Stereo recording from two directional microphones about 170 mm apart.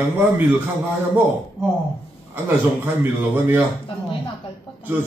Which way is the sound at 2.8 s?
15° right (ahead or behind).